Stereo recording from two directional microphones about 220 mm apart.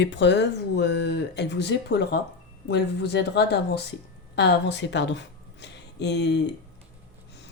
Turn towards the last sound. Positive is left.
turn(degrees=50)  # may be behind; listen again after turning